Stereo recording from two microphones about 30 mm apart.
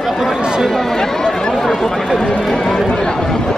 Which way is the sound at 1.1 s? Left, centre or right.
Centre.